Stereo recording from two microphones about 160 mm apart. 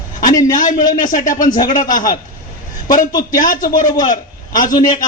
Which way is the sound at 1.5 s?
25° left (ahead or behind).